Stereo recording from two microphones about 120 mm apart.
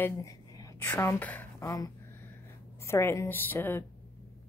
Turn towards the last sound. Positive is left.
turn(degrees=15)  # may be behind; listen again after turning